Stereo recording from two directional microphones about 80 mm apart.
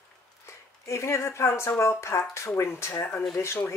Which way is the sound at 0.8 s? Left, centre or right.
Left.